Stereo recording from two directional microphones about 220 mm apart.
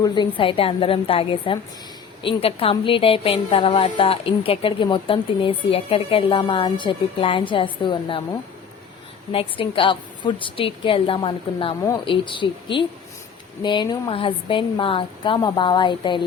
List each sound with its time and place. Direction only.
0.0 s a woman's voice: 20° left (ahead or behind)
9.3 s a woman's voice: 25° left (ahead or behind)